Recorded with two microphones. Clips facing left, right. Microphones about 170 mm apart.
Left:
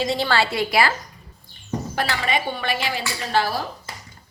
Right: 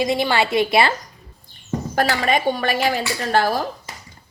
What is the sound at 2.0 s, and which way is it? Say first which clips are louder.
Dishes: right 5 dB; 45° right (ahead or behind).